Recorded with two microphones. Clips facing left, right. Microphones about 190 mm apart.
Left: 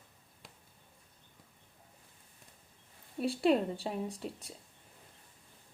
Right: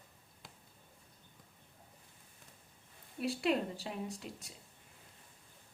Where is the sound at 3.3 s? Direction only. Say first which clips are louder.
Left 5 dB; 30° left (ahead or behind).